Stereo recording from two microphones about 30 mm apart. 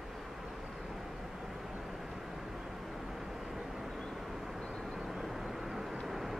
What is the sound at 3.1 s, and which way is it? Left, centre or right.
Vehicle, centre.